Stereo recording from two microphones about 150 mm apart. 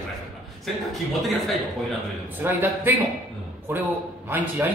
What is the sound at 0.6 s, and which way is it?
Speech, centre (ahead or behind).